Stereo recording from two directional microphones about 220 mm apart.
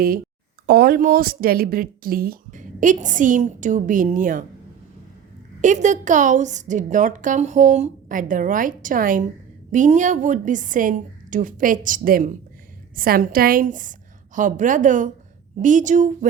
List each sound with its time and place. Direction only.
0.7 s a woman's voice: 45° right (ahead or behind)
5.6 s a woman's voice: 35° right (ahead or behind)